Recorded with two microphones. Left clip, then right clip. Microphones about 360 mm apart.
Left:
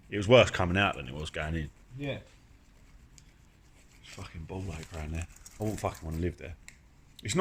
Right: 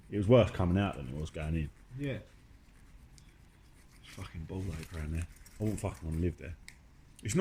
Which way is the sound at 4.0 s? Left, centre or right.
Centre.